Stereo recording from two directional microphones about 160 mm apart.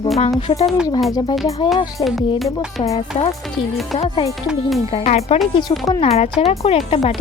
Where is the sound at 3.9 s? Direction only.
35° left (ahead or behind).